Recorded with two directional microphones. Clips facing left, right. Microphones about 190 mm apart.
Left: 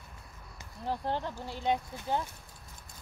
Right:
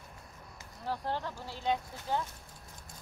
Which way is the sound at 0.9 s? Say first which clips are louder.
Left 2 dB; 20° left (ahead or behind).